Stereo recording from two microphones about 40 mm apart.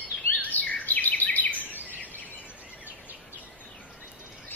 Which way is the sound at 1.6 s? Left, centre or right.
Right.